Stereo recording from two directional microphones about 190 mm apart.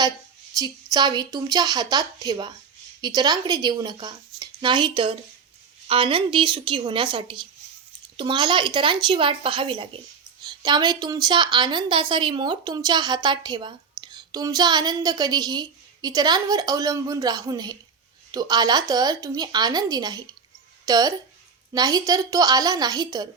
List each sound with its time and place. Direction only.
0.6 s a woman's voice: 20° right (ahead or behind)